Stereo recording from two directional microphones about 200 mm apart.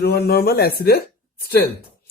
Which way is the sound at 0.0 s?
50° left (ahead or behind).